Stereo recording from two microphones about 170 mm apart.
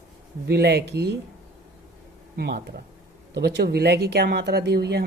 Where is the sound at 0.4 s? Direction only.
70° right (ahead or behind).